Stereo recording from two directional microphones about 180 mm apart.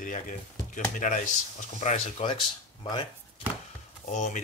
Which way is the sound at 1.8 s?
35° left (ahead or behind).